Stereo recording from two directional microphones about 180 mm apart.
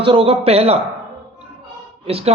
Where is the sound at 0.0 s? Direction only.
30° right (ahead or behind).